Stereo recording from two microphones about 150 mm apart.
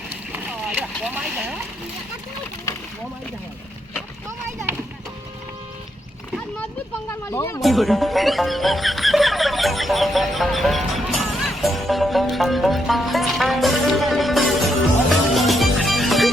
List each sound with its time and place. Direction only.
0.3 s boat: 10° right (ahead or behind)
7.1 s speech: 20° left (ahead or behind)
7.6 s music: centre (ahead or behind)